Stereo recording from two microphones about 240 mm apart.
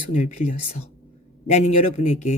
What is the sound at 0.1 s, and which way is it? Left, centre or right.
Speech, left.